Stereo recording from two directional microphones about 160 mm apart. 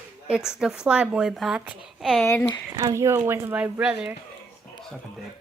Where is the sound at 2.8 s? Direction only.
20° right (ahead or behind).